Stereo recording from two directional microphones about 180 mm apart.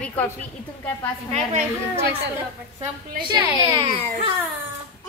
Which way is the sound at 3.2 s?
25° right (ahead or behind).